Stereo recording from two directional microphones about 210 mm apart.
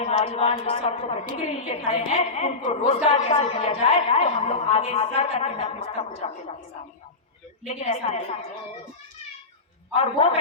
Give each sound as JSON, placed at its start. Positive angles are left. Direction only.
{"t": 0.0, "sound": "a woman's voice", "side_deg": 25}
{"t": 7.7, "sound": "a woman's voice", "side_deg": 30}
{"t": 9.9, "sound": "a woman's voice", "side_deg": 30}